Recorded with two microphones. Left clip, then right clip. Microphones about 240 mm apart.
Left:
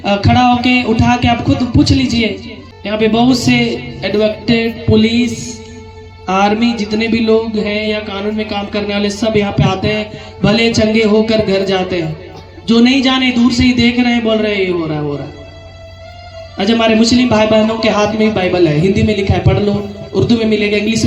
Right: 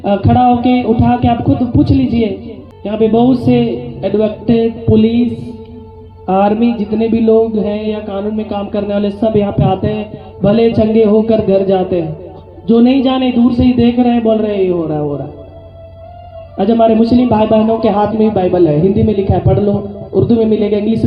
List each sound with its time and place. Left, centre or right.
0.0 s a man's voice: left
6.3 s a man's voice: left
16.6 s a man's voice: left